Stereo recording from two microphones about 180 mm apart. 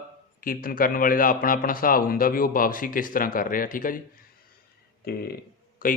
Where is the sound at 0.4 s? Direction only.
55° left (ahead or behind).